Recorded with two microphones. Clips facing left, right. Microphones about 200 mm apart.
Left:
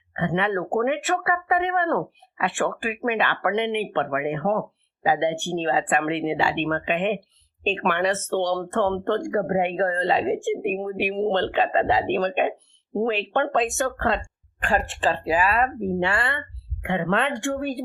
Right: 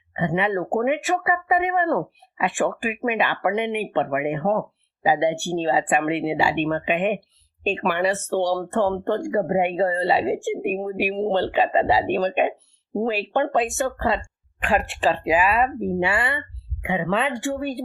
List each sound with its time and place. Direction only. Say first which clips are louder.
0.2 s speech: right 1 dB; 10° right (ahead or behind)